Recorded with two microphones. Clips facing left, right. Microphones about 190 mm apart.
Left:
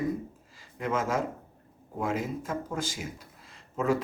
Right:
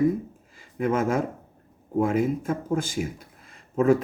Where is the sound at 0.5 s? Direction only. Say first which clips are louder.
Right 6 dB; 55° right (ahead or behind).